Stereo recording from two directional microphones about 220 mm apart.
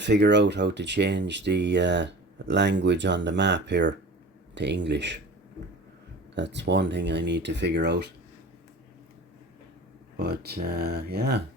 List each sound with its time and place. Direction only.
0.0 s speech: 50° right (ahead or behind)
6.3 s speech: 55° right (ahead or behind)
10.2 s speech: 45° right (ahead or behind)